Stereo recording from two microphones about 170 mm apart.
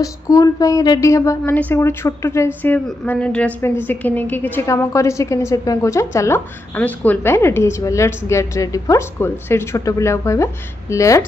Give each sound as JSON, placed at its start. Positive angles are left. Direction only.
{"t": 0.0, "sound": "a woman's voice", "side_deg": 20}